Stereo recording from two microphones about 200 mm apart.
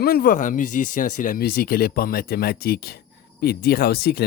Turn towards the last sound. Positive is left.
turn(degrees=50)  # may be behind; listen again after turning